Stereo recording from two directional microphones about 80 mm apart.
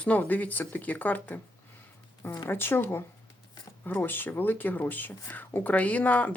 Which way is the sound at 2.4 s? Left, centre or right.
Left.